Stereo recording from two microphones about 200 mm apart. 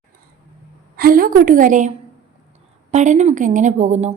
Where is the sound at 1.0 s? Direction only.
45° right (ahead or behind).